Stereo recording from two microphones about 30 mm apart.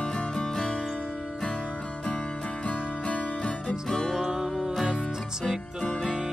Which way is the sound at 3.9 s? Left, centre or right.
Centre.